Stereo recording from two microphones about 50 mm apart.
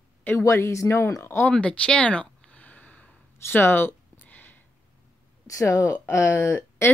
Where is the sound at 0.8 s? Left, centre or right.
Left.